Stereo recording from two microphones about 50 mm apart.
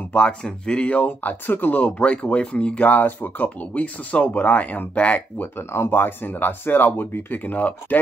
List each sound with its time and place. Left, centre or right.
0.1 s speech: centre; by 1.9 s left
1.9 s speech: left
5.7 s speech: left